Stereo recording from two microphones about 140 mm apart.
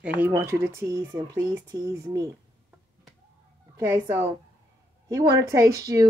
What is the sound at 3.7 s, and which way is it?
A woman's voice, 20° right (ahead or behind).